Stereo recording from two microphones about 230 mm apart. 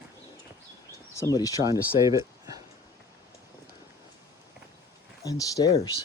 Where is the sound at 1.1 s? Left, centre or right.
Centre.